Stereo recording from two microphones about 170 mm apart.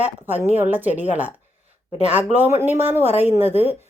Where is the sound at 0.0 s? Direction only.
10° right (ahead or behind).